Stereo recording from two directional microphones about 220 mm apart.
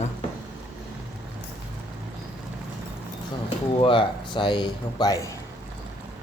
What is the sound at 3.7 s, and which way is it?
Speech, 25° left (ahead or behind).